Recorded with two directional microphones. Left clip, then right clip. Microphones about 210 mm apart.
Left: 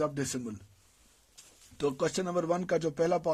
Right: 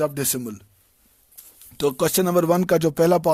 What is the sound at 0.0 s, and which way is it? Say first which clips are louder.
Speech: right 8 dB; 45° right (ahead or behind).